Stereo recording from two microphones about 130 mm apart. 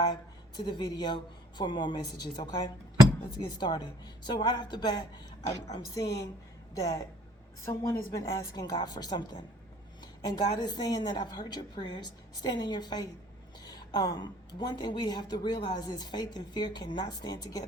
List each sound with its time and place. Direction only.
0.0 s a woman's voice: 30° left (ahead or behind)